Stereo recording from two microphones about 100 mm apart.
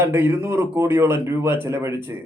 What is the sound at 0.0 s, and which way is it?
Speech, 20° right (ahead or behind).